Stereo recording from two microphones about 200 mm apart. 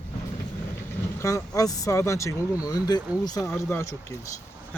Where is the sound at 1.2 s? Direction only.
15° left (ahead or behind).